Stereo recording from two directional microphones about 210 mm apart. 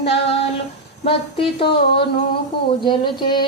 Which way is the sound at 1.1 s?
25° left (ahead or behind).